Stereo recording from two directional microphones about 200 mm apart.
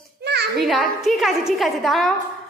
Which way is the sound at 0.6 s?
Centre (ahead or behind).